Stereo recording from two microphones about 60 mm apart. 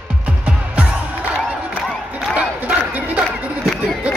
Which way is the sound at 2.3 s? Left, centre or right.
Right.